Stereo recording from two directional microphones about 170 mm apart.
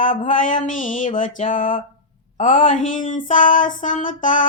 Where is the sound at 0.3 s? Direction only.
50° left (ahead or behind).